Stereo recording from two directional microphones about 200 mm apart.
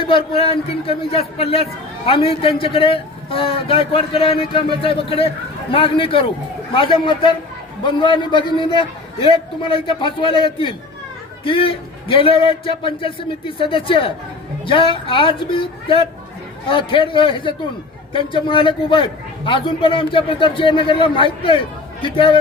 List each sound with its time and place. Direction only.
0.0 s a man's voice: 25° left (ahead or behind)